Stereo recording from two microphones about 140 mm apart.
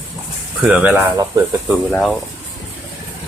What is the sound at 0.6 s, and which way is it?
Speech, 10° right (ahead or behind).